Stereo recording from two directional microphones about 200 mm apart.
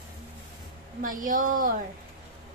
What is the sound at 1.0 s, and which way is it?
Speech, 40° right (ahead or behind).